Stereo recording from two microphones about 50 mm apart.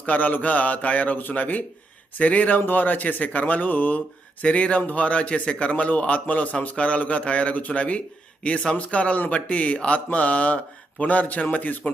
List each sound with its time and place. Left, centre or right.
0.0 s a man's voice: left
4.4 s a man's voice: left